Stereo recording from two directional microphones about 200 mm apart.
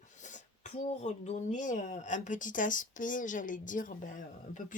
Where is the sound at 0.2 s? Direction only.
40° left (ahead or behind).